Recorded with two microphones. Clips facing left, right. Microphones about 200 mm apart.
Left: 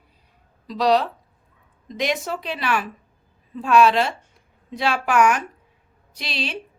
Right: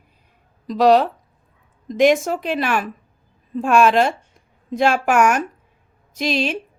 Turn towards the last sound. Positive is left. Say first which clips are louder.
# right 9 dB
turn(degrees=-45)  # may be behind; listen again after turning